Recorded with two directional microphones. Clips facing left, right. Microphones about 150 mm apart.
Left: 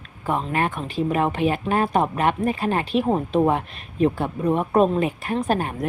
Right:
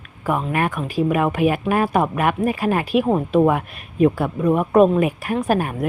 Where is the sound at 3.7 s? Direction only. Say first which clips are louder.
Right 4 dB; 30° left (ahead or behind).